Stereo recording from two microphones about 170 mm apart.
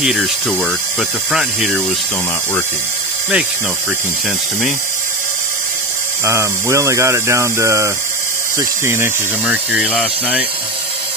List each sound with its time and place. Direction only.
0.0 s speech: centre (ahead or behind)
6.2 s speech: 15° right (ahead or behind)
9.8 s speech: 10° left (ahead or behind)